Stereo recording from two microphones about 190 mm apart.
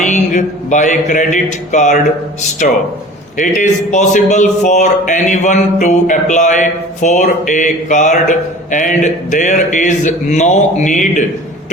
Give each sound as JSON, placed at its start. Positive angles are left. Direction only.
{"t": 0.0, "sound": "a man's voice", "side_deg": 40}